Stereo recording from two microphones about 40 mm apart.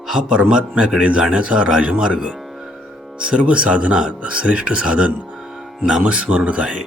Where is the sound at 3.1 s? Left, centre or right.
Right.